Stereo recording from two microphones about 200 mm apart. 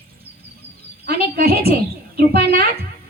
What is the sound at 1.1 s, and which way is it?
Speech, 50° right (ahead or behind).